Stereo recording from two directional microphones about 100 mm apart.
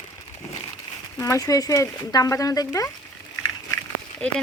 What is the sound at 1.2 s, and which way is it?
Speech, 35° left (ahead or behind).